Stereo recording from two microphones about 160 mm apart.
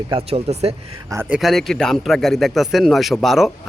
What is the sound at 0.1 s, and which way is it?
Speech, 40° right (ahead or behind).